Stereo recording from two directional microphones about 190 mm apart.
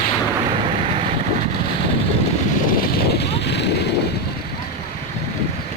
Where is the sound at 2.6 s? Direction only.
60° left (ahead or behind).